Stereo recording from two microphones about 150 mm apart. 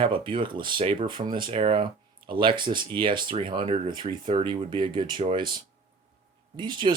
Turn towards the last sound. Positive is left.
turn(degrees=-30)  # may be behind; listen again after turning